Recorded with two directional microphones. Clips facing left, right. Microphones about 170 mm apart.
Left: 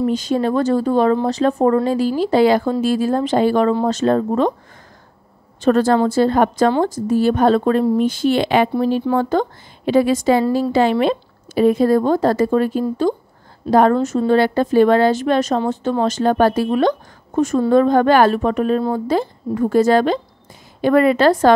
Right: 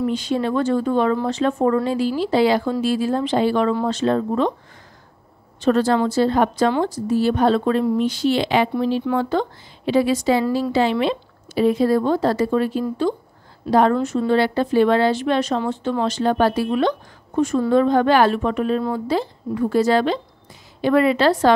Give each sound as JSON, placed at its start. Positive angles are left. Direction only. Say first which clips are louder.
{"t": 0.0, "sound": "speech", "louder": "left 3 dB", "side_deg": 40}
{"t": 5.6, "sound": "speech", "louder": "left 3 dB", "side_deg": 50}